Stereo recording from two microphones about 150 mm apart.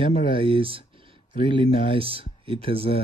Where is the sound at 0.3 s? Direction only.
35° right (ahead or behind).